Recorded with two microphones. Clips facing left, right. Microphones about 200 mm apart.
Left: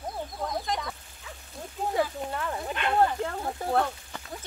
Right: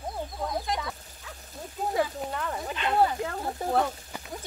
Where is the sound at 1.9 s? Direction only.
Centre (ahead or behind).